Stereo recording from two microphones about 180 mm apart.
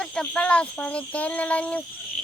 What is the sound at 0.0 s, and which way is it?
Speech, 5° left (ahead or behind).